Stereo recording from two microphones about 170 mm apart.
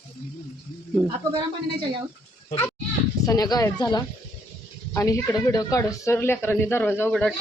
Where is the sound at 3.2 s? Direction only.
20° left (ahead or behind).